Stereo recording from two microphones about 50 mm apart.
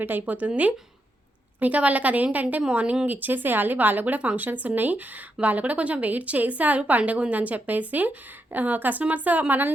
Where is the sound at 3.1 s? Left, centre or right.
Right.